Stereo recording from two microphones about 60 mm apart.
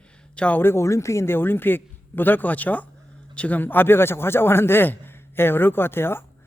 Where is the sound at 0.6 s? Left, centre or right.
Left.